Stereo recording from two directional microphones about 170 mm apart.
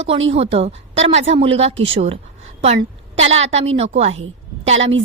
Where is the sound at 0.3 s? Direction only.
35° right (ahead or behind).